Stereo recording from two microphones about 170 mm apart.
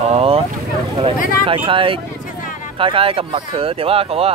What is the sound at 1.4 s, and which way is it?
Speech, 30° right (ahead or behind).